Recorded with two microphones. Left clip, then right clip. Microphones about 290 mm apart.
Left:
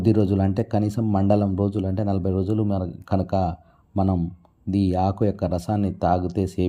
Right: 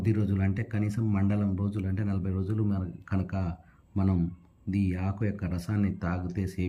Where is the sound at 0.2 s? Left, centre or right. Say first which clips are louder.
Left 11 dB; left.